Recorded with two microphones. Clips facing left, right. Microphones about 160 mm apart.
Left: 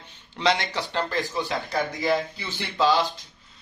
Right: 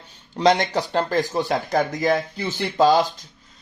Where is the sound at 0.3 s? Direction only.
45° right (ahead or behind).